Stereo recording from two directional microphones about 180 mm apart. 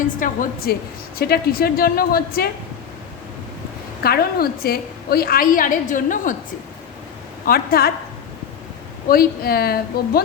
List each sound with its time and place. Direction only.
0.2 s a woman's voice: 55° left (ahead or behind)
4.0 s a woman's voice: 60° left (ahead or behind)
7.4 s a woman's voice: 55° left (ahead or behind)
9.0 s a woman's voice: 55° left (ahead or behind)